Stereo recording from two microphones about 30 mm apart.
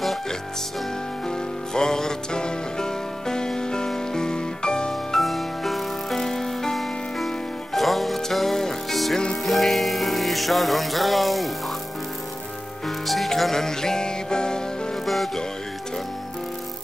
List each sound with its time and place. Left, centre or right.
1.2 s music: left
5.1 s music: centre
12.8 s music: centre
13.4 s music: centre